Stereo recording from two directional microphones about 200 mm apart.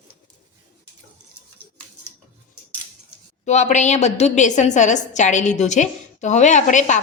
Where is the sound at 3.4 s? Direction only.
35° left (ahead or behind).